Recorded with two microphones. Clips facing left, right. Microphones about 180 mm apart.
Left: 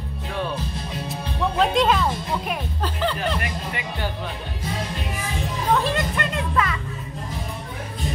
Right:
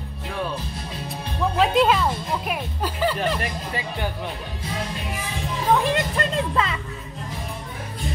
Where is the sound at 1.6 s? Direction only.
Centre (ahead or behind).